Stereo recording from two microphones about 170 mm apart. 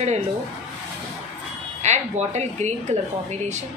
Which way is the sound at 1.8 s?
45° right (ahead or behind).